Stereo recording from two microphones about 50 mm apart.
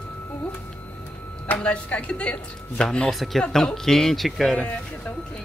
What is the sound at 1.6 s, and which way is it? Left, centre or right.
Speech, left.